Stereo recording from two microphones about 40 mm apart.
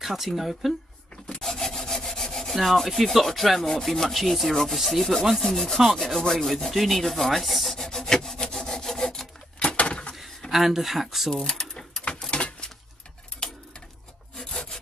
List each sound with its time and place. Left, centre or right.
0.0 s rub: centre
1.4 s rub: centre
6.7 s wood: centre
9.6 s a sound: left
10.5 s rub: centre
11.4 s bird: centre
12.1 s a sound: left
14.4 s wood: centre